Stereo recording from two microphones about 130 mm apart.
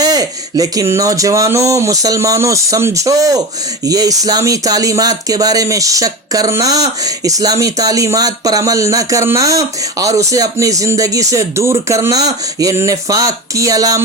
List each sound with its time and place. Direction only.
0.0 s speech: 30° right (ahead or behind)